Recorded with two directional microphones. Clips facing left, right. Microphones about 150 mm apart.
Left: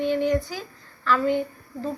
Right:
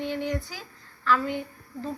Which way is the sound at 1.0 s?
10° right (ahead or behind).